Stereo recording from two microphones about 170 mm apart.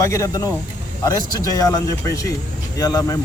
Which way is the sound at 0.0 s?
20° left (ahead or behind).